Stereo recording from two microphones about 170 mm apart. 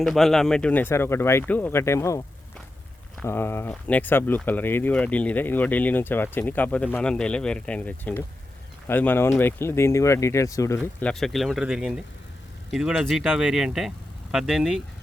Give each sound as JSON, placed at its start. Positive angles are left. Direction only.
{"t": 0.0, "sound": "speech", "side_deg": 0}
{"t": 3.2, "sound": "speech", "side_deg": 15}
{"t": 11.0, "sound": "speech", "side_deg": 5}